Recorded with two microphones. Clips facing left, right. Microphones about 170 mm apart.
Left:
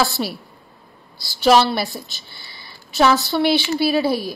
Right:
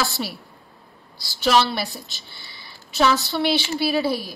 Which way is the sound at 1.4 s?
50° left (ahead or behind).